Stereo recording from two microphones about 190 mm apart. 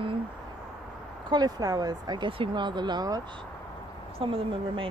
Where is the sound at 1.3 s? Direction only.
20° right (ahead or behind).